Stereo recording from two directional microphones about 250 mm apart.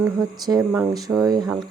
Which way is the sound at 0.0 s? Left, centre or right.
Centre.